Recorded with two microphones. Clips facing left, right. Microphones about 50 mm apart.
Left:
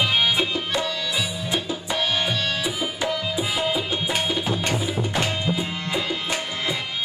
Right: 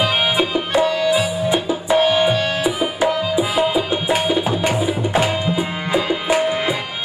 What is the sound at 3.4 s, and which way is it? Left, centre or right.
Music, centre.